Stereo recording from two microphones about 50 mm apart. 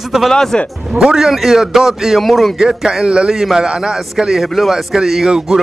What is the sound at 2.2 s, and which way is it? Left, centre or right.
Speech, centre.